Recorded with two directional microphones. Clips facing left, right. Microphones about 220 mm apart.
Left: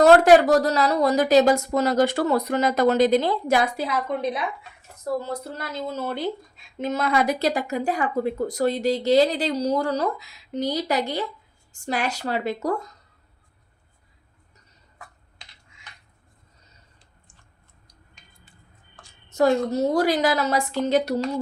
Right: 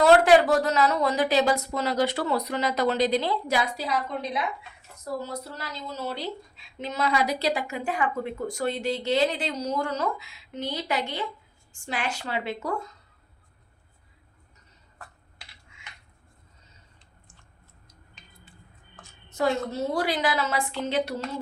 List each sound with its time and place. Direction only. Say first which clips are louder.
0.0 s speech: left 4 dB; 40° left (ahead or behind)
5.3 s speech: left 5 dB; 50° left (ahead or behind)
15.4 s computer keyboard: even; 10° right (ahead or behind)
19.3 s speech: left 6 dB; 45° left (ahead or behind)